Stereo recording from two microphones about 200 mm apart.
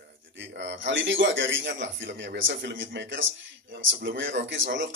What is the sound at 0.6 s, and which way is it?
A man's voice, 65° right (ahead or behind).